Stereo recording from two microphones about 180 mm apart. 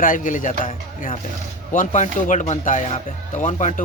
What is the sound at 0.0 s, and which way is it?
Speech, 45° left (ahead or behind).